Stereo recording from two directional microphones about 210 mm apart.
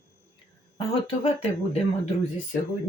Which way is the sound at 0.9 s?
25° left (ahead or behind).